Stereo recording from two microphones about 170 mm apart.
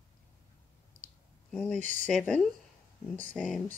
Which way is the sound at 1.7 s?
45° right (ahead or behind).